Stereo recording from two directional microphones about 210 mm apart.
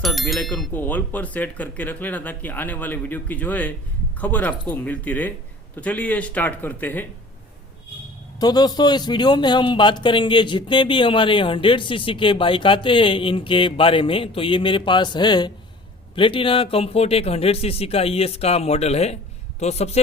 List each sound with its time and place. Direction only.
0.0 s speech: centre (ahead or behind)
8.4 s a man's voice: 20° left (ahead or behind)